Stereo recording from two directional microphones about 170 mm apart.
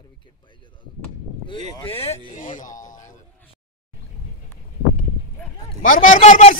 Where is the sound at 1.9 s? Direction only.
35° left (ahead or behind).